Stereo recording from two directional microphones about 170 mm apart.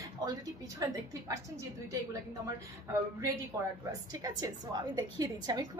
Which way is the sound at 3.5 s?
20° right (ahead or behind).